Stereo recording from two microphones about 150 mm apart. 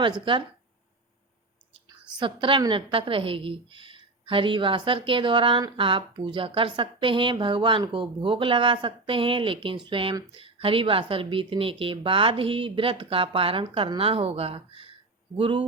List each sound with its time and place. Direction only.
0.0 s a woman's voice: 30° right (ahead or behind)
1.7 s a woman's voice: 35° right (ahead or behind)